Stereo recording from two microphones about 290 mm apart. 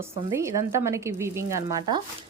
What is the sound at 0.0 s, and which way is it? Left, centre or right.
Speech, centre.